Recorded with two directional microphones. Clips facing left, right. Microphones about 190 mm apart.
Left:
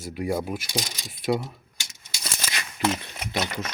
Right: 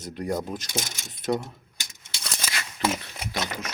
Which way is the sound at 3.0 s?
20° left (ahead or behind).